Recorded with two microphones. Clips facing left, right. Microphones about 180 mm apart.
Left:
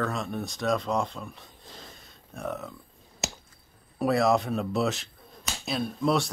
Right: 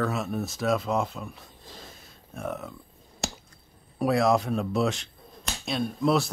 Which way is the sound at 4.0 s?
Centre (ahead or behind).